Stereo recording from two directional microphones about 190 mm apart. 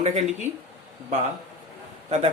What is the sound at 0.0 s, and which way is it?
Speech, 35° right (ahead or behind).